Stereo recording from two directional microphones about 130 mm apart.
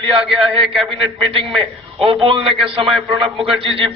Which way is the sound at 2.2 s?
45° right (ahead or behind).